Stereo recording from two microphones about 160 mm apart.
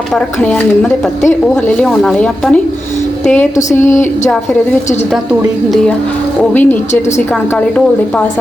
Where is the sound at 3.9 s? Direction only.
50° left (ahead or behind).